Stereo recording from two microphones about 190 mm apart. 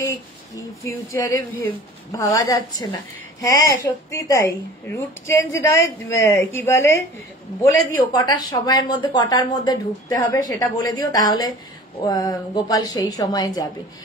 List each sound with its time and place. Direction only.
0.8 s a woman's voice: 15° left (ahead or behind)